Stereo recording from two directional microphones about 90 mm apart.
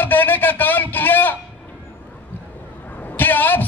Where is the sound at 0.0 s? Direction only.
20° left (ahead or behind).